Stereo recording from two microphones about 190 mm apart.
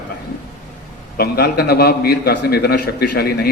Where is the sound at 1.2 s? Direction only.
55° left (ahead or behind).